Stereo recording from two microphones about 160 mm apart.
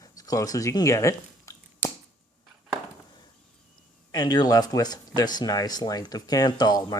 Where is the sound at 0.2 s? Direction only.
20° left (ahead or behind).